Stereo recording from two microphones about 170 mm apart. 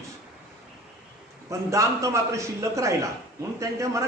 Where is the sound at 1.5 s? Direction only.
20° right (ahead or behind).